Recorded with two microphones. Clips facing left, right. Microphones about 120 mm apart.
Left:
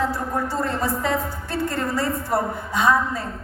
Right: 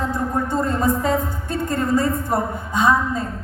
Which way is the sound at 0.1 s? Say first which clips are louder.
Right 3 dB; 20° right (ahead or behind).